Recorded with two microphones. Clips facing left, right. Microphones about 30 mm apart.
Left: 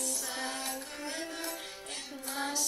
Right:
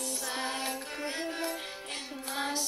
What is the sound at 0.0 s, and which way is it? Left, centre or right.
Music, right.